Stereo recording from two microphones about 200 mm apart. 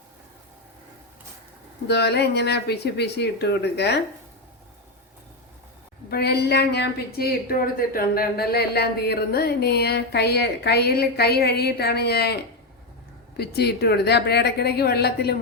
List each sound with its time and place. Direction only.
1.9 s speech: 55° left (ahead or behind)
6.1 s a woman's voice: 55° left (ahead or behind)